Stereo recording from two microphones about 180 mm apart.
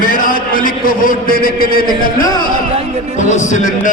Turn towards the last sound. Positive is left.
turn(degrees=45)  # may be behind; listen again after turning